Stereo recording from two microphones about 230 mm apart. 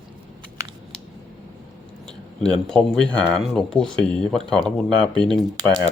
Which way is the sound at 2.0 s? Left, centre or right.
Centre.